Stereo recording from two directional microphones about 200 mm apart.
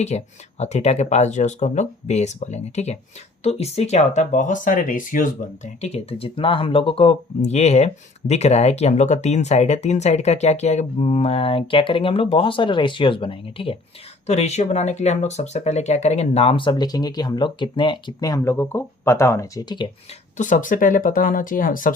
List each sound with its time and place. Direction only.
0.1 s speech: 35° left (ahead or behind)
20.3 s speech: 40° left (ahead or behind)